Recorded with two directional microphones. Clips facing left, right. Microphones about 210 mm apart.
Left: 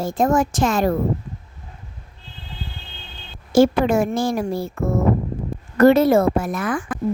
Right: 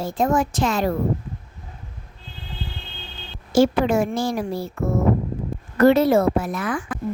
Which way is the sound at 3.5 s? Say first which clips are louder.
Left 2 dB; 50° left (ahead or behind).